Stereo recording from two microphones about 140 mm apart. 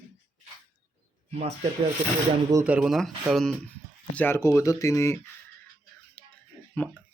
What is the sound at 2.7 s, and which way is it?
Speech, 5° right (ahead or behind).